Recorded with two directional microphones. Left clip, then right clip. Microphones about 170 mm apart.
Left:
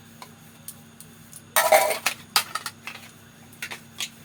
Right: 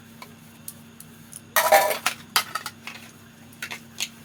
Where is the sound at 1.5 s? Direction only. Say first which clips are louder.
Right 1 dB; 20° right (ahead or behind).